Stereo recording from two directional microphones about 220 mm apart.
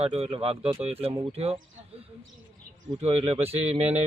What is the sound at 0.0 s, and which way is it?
A man's voice, 30° right (ahead or behind).